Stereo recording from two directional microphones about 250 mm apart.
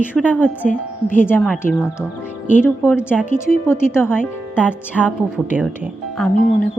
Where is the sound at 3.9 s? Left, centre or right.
Centre.